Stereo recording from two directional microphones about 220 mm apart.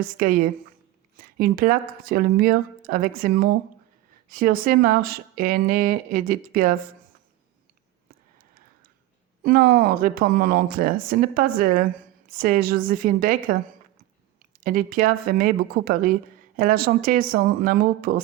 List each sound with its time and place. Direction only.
0.0 s speech: 40° right (ahead or behind)
9.4 s speech: 45° right (ahead or behind)
14.6 s speech: 40° right (ahead or behind)